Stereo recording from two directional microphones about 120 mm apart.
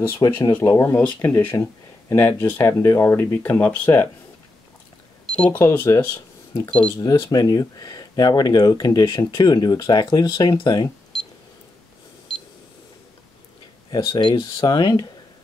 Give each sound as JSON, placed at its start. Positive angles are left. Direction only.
{"t": 0.2, "sound": "speech", "side_deg": 35}
{"t": 5.2, "sound": "cash register", "side_deg": 5}
{"t": 5.6, "sound": "speech", "side_deg": 20}
{"t": 7.0, "sound": "speech", "side_deg": 35}
{"t": 11.1, "sound": "camera", "side_deg": 5}
{"t": 13.8, "sound": "speech", "side_deg": 35}